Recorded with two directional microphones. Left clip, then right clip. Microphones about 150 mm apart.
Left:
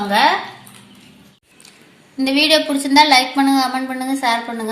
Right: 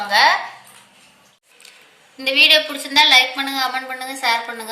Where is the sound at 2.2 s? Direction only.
40° left (ahead or behind); by 4.7 s 60° left (ahead or behind).